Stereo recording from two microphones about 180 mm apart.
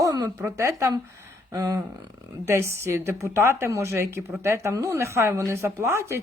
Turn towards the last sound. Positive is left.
turn(degrees=-15)  # may be behind; listen again after turning